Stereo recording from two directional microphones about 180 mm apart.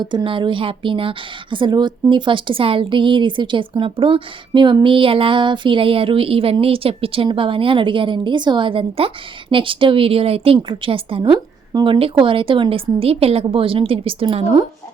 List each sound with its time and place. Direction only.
0.0 s a woman's voice: 25° right (ahead or behind)